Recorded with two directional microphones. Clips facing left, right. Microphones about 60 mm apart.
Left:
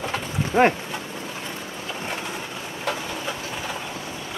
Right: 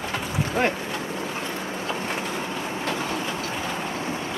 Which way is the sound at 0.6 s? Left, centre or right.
Left.